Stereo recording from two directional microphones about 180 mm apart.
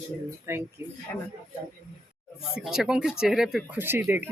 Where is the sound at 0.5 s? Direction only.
15° right (ahead or behind).